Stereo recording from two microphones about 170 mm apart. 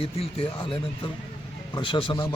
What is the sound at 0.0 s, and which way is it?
Speech, 35° left (ahead or behind).